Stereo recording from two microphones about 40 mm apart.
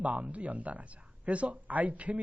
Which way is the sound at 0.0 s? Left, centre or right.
Right.